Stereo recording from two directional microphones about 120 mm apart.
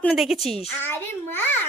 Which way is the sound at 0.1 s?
Centre (ahead or behind).